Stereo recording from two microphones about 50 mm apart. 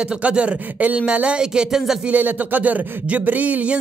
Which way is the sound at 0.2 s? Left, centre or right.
Right.